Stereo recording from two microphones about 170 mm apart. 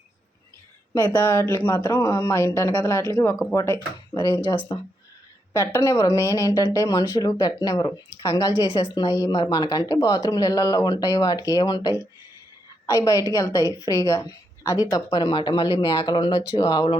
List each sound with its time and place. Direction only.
0.9 s a woman's voice: 20° left (ahead or behind)